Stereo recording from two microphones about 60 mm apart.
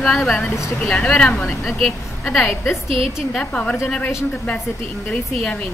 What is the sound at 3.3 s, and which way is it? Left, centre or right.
Speech, centre.